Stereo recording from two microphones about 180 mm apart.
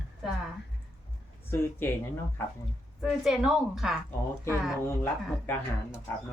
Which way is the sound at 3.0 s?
5° right (ahead or behind).